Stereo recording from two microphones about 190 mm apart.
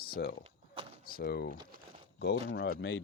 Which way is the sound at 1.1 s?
55° left (ahead or behind).